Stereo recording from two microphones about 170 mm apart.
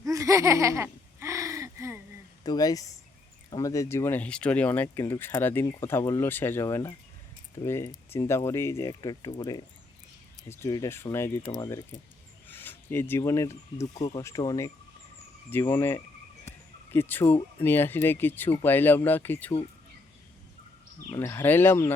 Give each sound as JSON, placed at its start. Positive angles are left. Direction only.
{"t": 0.0, "sound": "laughter", "side_deg": -20}
{"t": 2.4, "sound": "speech", "side_deg": 25}
{"t": 15.7, "sound": "speech", "side_deg": 15}
{"t": 16.5, "sound": "a sound", "side_deg": 15}
{"t": 17.6, "sound": "speech", "side_deg": 10}
{"t": 21.1, "sound": "speech", "side_deg": 15}